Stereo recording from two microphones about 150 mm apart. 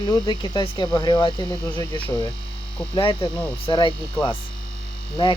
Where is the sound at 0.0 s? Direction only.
30° left (ahead or behind).